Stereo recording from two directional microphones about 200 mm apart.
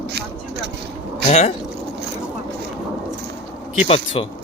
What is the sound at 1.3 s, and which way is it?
Speech, 30° left (ahead or behind).